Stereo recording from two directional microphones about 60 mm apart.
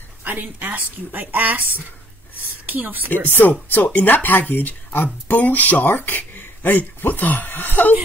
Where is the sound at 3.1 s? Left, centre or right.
Left.